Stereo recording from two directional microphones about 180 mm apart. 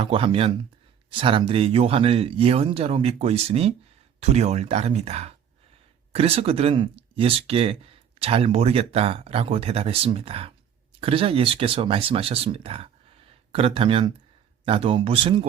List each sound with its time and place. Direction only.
0.0 s speech: 30° right (ahead or behind)